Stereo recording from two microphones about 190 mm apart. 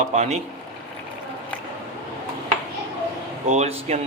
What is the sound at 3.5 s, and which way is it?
Speech, 35° right (ahead or behind).